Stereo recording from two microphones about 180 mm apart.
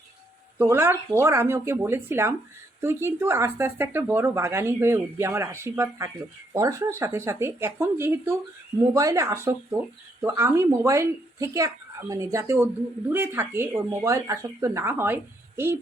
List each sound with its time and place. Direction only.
0.6 s speech: 15° right (ahead or behind)